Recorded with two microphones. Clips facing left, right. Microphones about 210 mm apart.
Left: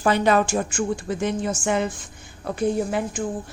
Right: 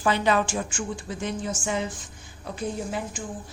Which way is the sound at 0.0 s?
45° left (ahead or behind).